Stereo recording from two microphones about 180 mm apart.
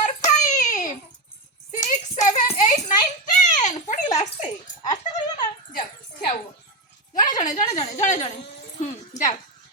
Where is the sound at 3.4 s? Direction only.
45° left (ahead or behind).